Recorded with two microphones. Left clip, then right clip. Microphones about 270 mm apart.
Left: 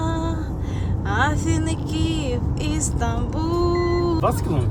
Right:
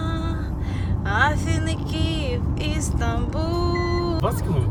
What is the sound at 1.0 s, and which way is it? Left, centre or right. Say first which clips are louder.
Vehicle: right 1 dB; centre.